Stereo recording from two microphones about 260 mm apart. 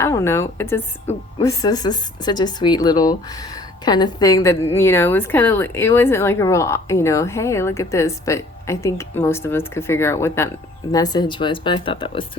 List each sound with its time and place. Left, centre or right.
0.0 s a woman's voice: centre